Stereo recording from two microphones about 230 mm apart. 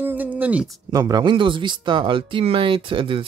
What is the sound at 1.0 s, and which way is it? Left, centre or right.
Speech, centre.